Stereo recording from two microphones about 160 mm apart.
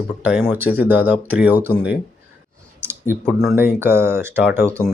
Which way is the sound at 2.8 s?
15° right (ahead or behind).